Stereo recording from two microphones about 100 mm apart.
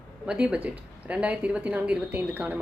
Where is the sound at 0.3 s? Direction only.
10° right (ahead or behind).